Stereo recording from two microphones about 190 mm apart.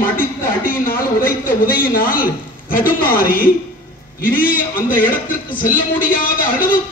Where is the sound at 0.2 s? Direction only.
50° left (ahead or behind).